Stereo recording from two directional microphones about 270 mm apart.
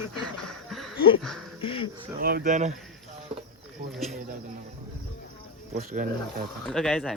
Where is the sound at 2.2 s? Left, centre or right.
Right.